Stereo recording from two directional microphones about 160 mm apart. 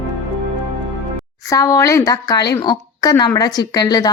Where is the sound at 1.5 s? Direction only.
20° left (ahead or behind).